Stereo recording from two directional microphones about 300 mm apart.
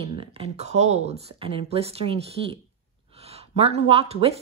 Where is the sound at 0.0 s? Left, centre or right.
Centre.